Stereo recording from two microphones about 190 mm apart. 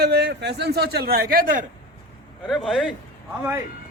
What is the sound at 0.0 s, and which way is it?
A man's voice, 60° right (ahead or behind).